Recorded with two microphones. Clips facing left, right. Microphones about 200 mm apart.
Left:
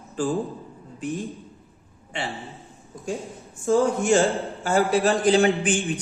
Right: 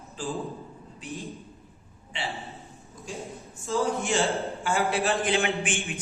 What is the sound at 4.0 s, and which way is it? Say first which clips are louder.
A man's voice: left 6 dB; 45° left (ahead or behind).